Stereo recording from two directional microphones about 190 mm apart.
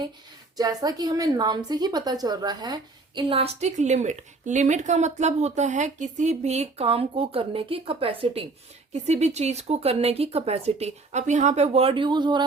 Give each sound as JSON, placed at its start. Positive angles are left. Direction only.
{"t": 0.5, "sound": "a woman's voice", "side_deg": -20}